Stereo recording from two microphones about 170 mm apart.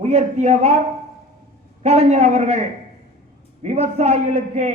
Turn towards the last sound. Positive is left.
turn(degrees=-40)  # may be behind; listen again after turning